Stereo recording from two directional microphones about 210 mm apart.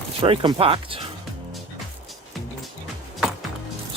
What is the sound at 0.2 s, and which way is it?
Speech, 25° right (ahead or behind).